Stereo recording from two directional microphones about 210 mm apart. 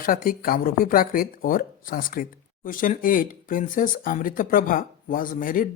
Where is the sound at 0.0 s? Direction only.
40° left (ahead or behind).